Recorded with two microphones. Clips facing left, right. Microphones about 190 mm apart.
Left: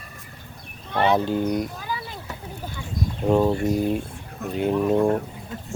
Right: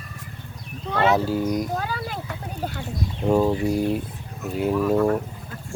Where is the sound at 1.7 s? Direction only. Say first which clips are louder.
Right 5 dB; 65° right (ahead or behind).